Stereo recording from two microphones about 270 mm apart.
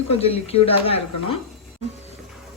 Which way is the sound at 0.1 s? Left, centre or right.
Left.